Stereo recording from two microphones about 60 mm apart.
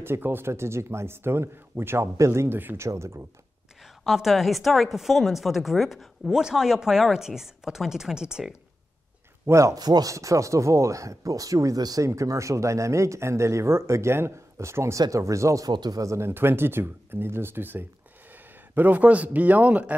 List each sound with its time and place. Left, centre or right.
0.0 s speech: right
2.5 s speech: right
2.8 s speech: right
3.8 s a woman's voice: centre
9.5 s speech: right
12.1 s speech: right
15.0 s speech: right
16.2 s speech: right